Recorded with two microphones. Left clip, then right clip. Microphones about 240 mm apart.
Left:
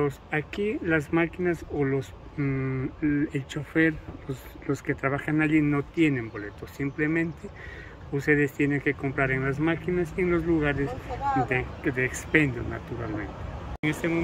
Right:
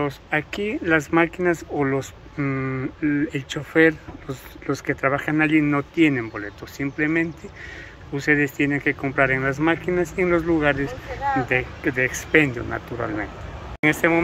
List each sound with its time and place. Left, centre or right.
0.0 s speech: centre